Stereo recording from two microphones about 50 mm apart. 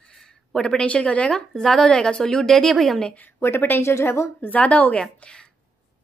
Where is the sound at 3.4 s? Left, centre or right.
Left.